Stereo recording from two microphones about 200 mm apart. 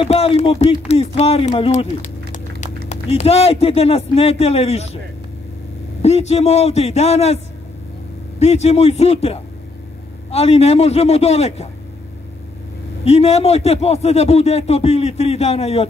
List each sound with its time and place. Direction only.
0.0 s a man's voice: 30° left (ahead or behind)
6.0 s a man's voice: 30° left (ahead or behind)
8.4 s a man's voice: 30° left (ahead or behind)
13.0 s a man's voice: 30° left (ahead or behind)